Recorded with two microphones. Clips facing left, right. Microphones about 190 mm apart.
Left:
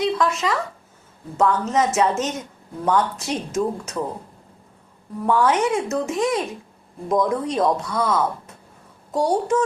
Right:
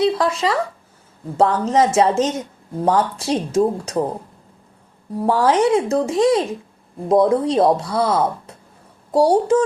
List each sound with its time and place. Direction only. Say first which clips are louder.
0.0 s speech: right 3 dB; 30° right (ahead or behind)
5.1 s speech: right 3 dB; 35° right (ahead or behind)